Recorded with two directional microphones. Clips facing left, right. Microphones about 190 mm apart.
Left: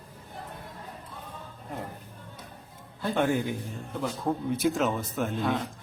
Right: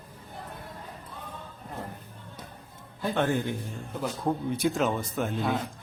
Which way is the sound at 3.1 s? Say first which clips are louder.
Left 1 dB; 10° left (ahead or behind).